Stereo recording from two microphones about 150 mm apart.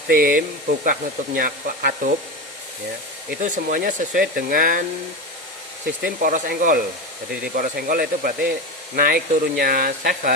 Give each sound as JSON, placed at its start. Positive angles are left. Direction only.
{"t": 0.1, "sound": "speech", "side_deg": -70}
{"t": 3.2, "sound": "speech", "side_deg": -60}
{"t": 6.0, "sound": "speech", "side_deg": -70}